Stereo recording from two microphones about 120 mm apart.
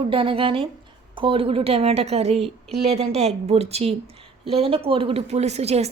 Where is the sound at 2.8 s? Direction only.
65° right (ahead or behind).